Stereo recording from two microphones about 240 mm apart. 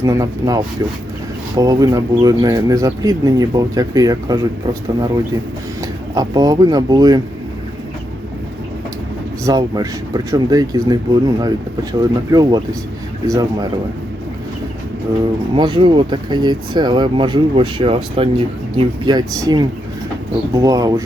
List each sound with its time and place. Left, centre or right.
0.0 s speech: centre
6.1 s speech: centre
9.4 s speech: centre
15.5 s speech: centre